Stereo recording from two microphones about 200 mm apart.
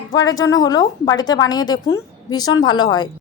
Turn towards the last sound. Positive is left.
turn(degrees=20)  # may be behind; listen again after turning